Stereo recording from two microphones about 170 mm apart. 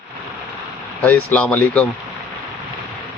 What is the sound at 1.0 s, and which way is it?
Speech, 10° left (ahead or behind).